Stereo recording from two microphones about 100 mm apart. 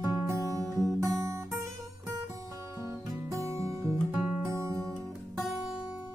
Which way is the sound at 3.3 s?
30° right (ahead or behind).